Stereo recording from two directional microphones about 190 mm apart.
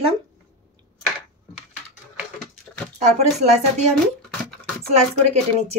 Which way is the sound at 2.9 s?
35° right (ahead or behind).